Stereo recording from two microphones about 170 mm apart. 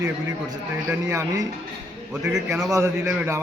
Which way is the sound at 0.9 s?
15° right (ahead or behind).